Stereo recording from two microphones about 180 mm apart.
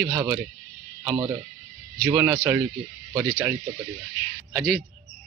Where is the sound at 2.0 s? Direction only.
5° right (ahead or behind).